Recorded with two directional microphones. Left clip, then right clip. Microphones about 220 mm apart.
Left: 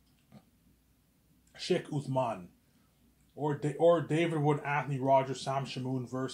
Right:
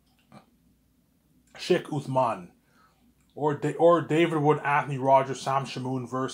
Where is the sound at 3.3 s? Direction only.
20° right (ahead or behind).